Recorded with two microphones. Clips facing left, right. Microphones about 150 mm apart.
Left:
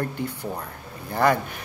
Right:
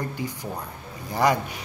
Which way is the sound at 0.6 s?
15° right (ahead or behind).